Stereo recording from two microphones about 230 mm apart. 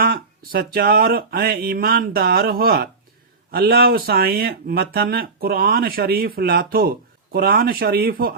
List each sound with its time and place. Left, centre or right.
0.0 s speech: right